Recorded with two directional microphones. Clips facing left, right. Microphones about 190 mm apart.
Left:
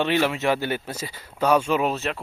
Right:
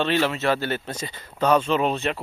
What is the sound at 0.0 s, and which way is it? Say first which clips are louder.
Speech: even; 15° left (ahead or behind).